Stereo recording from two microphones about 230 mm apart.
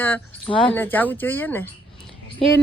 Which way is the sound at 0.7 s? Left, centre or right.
Centre.